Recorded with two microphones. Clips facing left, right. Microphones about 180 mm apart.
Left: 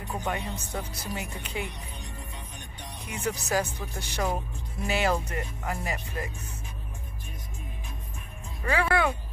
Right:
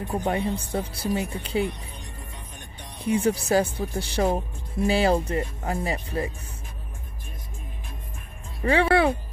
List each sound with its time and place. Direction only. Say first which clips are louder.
0.2 s speech: right 7 dB; 35° right (ahead or behind)
3.1 s speech: right 8 dB; 30° right (ahead or behind)
8.6 s speech: right 6 dB; 30° right (ahead or behind)